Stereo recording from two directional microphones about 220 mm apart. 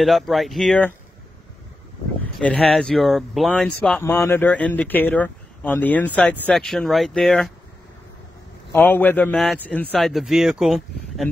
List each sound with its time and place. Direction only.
0.0 s speech: centre (ahead or behind)
2.3 s speech: centre (ahead or behind)
8.7 s speech: 10° left (ahead or behind)